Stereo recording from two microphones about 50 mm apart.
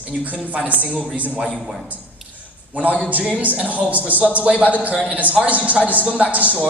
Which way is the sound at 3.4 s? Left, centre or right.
Right.